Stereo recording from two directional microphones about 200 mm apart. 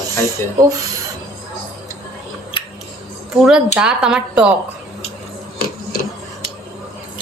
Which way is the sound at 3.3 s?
Centre (ahead or behind).